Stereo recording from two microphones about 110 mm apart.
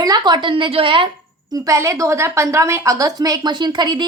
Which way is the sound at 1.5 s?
30° right (ahead or behind).